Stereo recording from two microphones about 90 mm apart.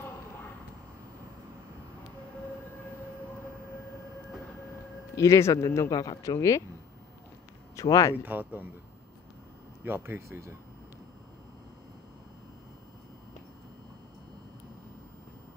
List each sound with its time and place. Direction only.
5.1 s speech: 35° left (ahead or behind)
7.7 s speech: 40° left (ahead or behind)
8.2 s speech: 20° right (ahead or behind)
9.8 s speech: 25° right (ahead or behind)